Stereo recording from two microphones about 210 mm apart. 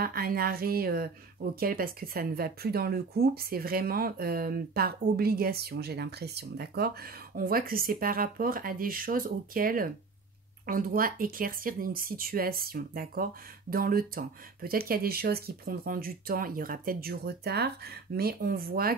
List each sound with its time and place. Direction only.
0.0 s speech: 45° right (ahead or behind)